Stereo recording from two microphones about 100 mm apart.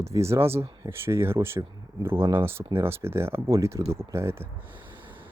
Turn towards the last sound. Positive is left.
turn(degrees=-20)  # may be behind; listen again after turning